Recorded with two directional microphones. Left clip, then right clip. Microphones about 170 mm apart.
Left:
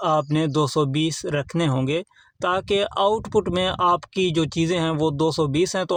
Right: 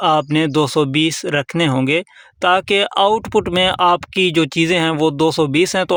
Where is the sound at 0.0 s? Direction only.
25° right (ahead or behind).